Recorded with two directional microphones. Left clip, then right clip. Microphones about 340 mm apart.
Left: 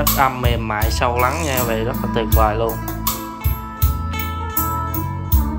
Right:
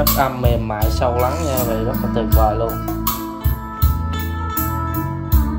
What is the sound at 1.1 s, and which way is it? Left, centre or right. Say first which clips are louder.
Speech: left 1 dB; left.